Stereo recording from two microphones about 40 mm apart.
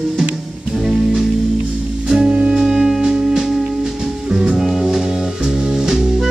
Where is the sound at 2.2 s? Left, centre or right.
Right.